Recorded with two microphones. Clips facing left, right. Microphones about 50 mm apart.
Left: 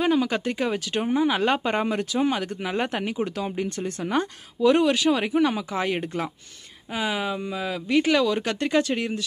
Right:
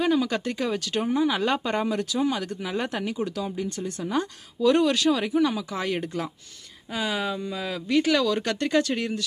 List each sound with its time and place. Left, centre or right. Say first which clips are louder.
0.0 s speech: left 1 dB; left
4.7 s speech: left 1 dB; centre; by 5.7 s left
5.7 s speech: left 2 dB; left